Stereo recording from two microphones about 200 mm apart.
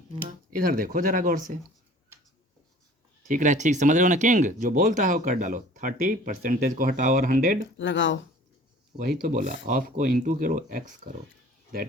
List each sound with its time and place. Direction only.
0.3 s speech: 45° right (ahead or behind)
3.2 s speech: 40° right (ahead or behind)
7.8 s speech: 65° left (ahead or behind)
9.0 s speech: 45° right (ahead or behind)